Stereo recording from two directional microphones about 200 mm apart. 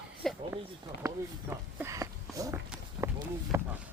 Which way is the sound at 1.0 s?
10° right (ahead or behind).